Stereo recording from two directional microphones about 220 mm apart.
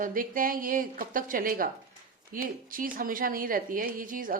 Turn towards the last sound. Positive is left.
turn(degrees=-40)  # may be behind; listen again after turning